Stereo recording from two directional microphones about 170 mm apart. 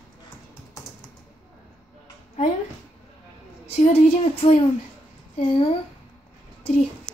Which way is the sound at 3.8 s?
40° left (ahead or behind).